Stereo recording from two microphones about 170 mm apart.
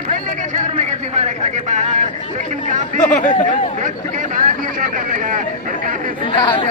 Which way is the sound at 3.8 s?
50° right (ahead or behind).